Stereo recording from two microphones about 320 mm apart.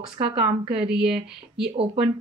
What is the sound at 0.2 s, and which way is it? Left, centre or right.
Speech, centre.